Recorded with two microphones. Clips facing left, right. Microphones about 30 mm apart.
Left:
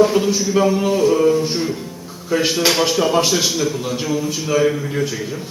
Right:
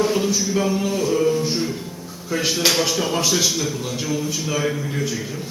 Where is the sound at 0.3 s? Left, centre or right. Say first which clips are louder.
Left 5 dB; left.